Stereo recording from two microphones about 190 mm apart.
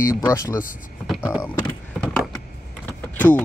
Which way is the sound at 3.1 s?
5° left (ahead or behind).